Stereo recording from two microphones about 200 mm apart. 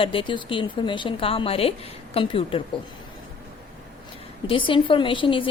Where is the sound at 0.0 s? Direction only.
25° left (ahead or behind).